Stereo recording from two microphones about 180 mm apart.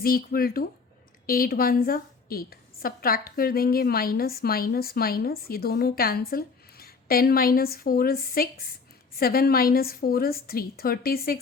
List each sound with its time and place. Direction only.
0.0 s a woman's voice: 55° left (ahead or behind)